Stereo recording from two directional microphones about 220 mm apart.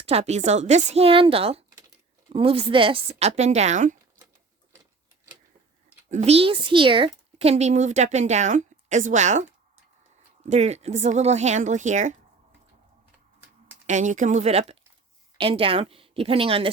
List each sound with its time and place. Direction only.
0.0 s speech: 30° right (ahead or behind)
6.1 s speech: 30° right (ahead or behind)
10.5 s speech: 30° right (ahead or behind)
13.8 s speech: 35° right (ahead or behind)